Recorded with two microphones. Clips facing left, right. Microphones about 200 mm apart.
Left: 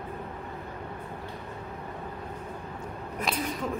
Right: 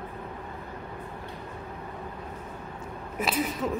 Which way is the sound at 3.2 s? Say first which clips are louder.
Right 3 dB; 5° right (ahead or behind).